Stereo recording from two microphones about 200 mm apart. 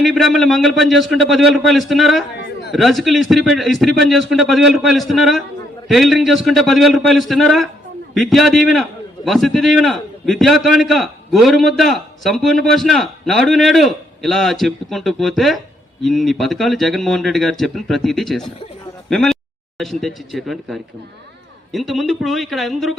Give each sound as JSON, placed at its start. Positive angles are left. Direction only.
{"t": 0.0, "sound": "a man's voice", "side_deg": 0}